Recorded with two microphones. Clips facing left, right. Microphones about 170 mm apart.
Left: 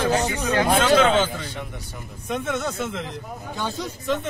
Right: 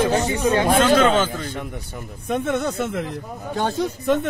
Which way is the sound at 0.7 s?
50° right (ahead or behind).